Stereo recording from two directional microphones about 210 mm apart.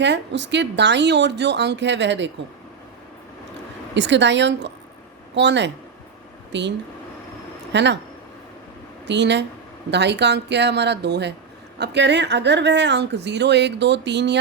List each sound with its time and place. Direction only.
0.0 s speech: 55° right (ahead or behind)
3.9 s speech: 55° right (ahead or behind)
9.0 s speech: 55° right (ahead or behind)